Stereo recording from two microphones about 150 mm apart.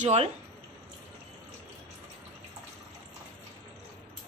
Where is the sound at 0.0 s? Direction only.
45° right (ahead or behind).